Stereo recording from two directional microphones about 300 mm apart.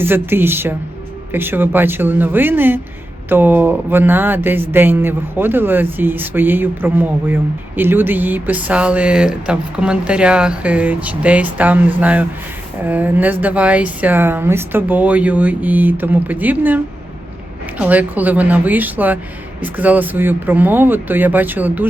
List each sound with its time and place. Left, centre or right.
0.0 s speech: centre